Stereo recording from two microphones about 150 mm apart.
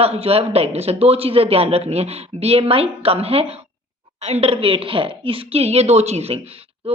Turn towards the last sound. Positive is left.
turn(degrees=-45)  # may be behind; listen again after turning